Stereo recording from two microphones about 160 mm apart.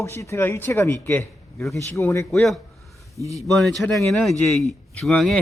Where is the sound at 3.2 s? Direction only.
20° right (ahead or behind).